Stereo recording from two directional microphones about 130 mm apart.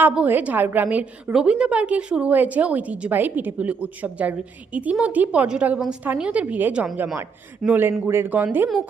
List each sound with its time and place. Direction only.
0.0 s a woman's voice: 10° right (ahead or behind)